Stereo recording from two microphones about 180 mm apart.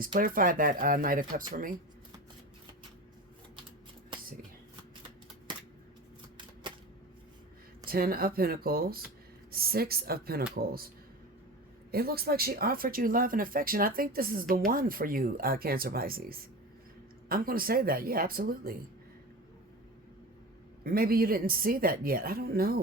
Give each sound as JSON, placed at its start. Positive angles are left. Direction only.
{"t": 0.0, "sound": "speech", "side_deg": -50}
{"t": 6.3, "sound": "typewriter", "side_deg": -25}
{"t": 7.9, "sound": "speech", "side_deg": -55}
{"t": 11.9, "sound": "speech", "side_deg": -60}
{"t": 20.8, "sound": "speech", "side_deg": -55}